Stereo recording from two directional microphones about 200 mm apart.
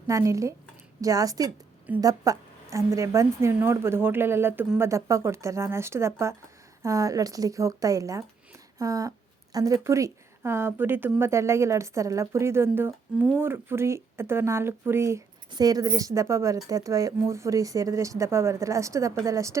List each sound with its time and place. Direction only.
0.1 s a woman's voice: 15° right (ahead or behind)